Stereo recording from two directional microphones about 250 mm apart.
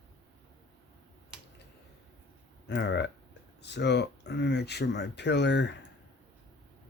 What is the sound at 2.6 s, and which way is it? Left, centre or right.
Speech, left.